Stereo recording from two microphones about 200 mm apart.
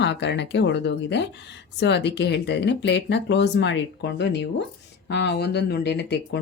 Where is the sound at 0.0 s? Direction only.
60° left (ahead or behind).